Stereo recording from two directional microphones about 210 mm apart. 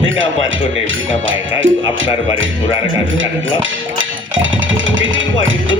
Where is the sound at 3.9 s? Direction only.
65° right (ahead or behind).